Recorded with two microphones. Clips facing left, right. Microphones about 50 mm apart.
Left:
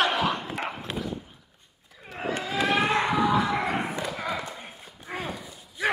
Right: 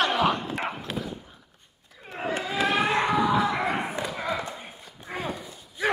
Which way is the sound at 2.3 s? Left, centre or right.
Centre.